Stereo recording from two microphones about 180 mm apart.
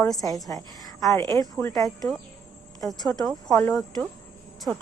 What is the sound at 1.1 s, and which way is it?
Speech, 15° left (ahead or behind).